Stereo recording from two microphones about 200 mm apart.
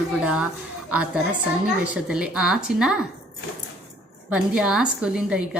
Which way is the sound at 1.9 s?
5° right (ahead or behind).